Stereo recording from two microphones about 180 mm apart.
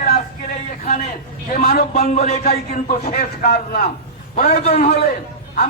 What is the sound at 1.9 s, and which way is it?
Speech, 35° left (ahead or behind).